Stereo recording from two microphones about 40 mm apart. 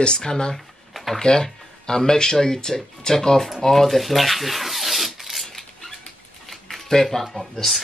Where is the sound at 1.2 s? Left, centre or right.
Centre.